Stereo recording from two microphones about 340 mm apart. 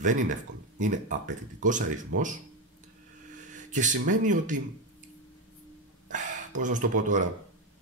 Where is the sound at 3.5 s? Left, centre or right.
Right.